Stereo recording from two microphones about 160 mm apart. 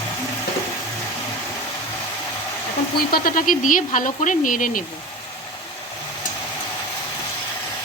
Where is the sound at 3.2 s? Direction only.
55° left (ahead or behind).